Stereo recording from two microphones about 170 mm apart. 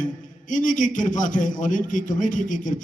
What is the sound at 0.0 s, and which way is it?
A man's voice, 50° left (ahead or behind).